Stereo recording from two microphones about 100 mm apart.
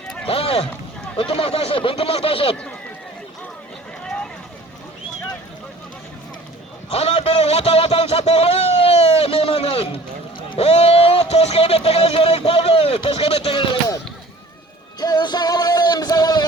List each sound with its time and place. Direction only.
0.3 s speech: 75° left (ahead or behind)
1.1 s speech: 65° left (ahead or behind)
4.0 s boat: 10° left (ahead or behind)
6.9 s speech: 70° left (ahead or behind)
10.6 s speech: 90° left; by 13.7 s 75° left (ahead or behind)
15.0 s music: 45° left (ahead or behind)